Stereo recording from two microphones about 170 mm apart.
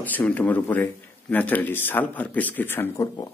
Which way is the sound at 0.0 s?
10° left (ahead or behind).